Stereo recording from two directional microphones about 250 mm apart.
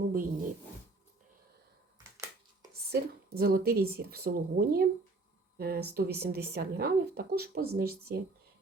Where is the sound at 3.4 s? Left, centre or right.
Right.